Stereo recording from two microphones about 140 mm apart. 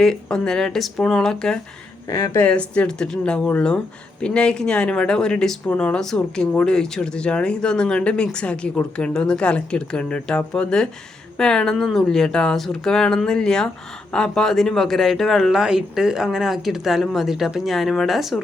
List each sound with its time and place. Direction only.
0.0 s speech: 5° left (ahead or behind)
2.0 s speech: 20° left (ahead or behind)
2.5 s speech: 10° left (ahead or behind)